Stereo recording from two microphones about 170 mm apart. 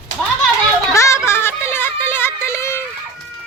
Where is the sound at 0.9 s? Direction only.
15° left (ahead or behind).